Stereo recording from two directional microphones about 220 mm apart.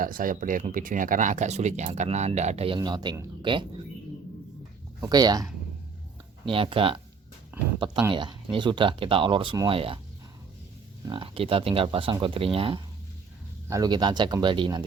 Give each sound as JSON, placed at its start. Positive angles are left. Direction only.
{"t": 0.0, "sound": "speech", "side_deg": -40}
{"t": 4.9, "sound": "speech", "side_deg": -15}
{"t": 6.5, "sound": "speech", "side_deg": -25}
{"t": 7.5, "sound": "speech", "side_deg": -10}
{"t": 8.1, "sound": "speech", "side_deg": -20}
{"t": 11.1, "sound": "speech", "side_deg": -25}